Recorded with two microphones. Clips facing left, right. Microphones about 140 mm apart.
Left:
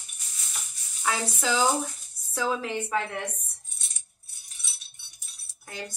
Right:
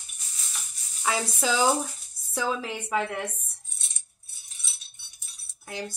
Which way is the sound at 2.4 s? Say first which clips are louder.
Left 1 dB; 10° right (ahead or behind).